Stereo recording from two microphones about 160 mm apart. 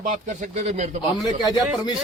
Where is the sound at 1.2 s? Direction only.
25° left (ahead or behind).